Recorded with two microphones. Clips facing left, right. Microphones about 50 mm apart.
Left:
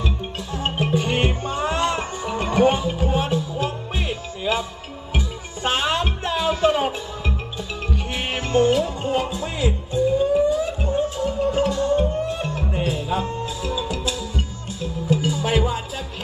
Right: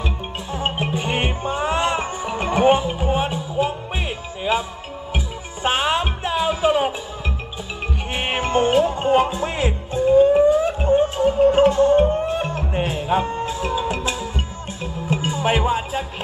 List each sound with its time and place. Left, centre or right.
0.0 s music: right
7.9 s music: right